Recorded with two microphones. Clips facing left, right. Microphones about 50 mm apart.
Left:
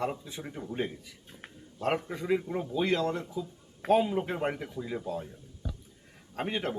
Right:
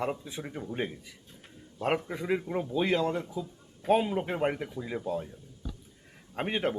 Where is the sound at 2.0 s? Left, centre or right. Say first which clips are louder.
Left 1 dB; centre.